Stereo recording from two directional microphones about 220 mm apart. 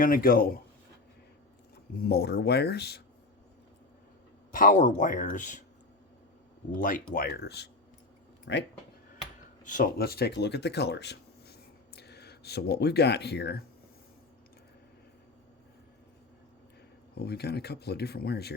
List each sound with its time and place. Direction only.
0.0 s speech: 40° left (ahead or behind)
2.0 s speech: 45° left (ahead or behind)
4.5 s speech: 35° left (ahead or behind)
6.7 s speech: 35° left (ahead or behind); by 8.6 s 55° left (ahead or behind)
9.6 s speech: 40° left (ahead or behind)
17.2 s speech: 45° left (ahead or behind)